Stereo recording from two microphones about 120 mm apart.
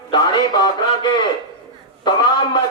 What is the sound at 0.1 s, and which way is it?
Speech, 35° left (ahead or behind).